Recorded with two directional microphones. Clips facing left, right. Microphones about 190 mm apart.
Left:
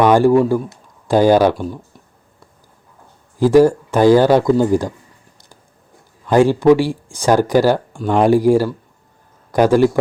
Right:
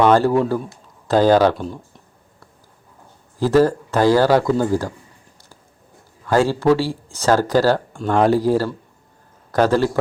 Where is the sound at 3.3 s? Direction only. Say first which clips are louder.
Left 4 dB; 15° left (ahead or behind).